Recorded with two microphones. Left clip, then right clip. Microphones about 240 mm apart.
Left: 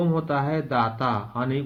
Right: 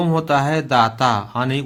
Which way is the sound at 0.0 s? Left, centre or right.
Right.